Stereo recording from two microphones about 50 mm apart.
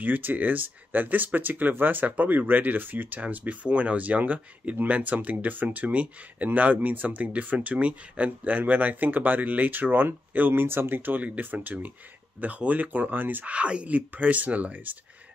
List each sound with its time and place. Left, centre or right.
0.0 s speech: right
13.5 s speech: right